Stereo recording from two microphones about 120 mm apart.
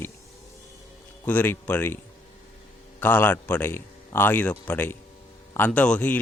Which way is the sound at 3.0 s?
15° left (ahead or behind).